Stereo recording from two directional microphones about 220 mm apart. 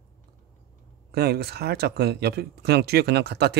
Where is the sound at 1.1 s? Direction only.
45° right (ahead or behind).